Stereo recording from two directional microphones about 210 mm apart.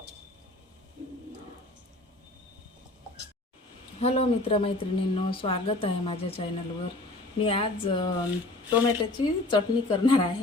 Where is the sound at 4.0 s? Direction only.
30° left (ahead or behind).